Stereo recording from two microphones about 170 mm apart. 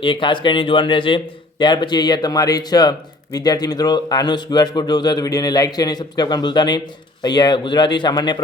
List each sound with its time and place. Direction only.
0.0 s speech: 30° left (ahead or behind)